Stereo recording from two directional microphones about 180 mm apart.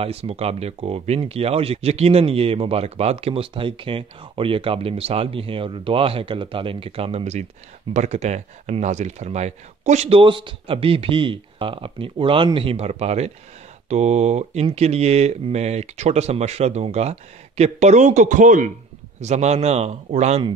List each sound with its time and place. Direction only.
0.0 s speech: 35° right (ahead or behind)